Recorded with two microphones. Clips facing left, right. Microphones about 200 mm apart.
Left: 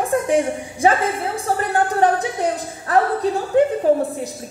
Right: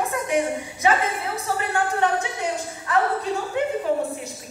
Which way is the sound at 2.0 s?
35° left (ahead or behind).